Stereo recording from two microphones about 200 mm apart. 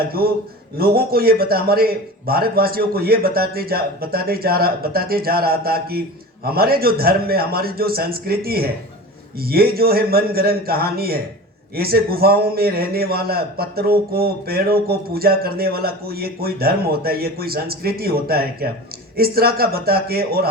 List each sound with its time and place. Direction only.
0.8 s a man's voice: 50° right (ahead or behind)